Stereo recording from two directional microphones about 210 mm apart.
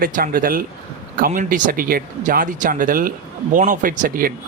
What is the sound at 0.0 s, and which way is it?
Speech, 40° right (ahead or behind).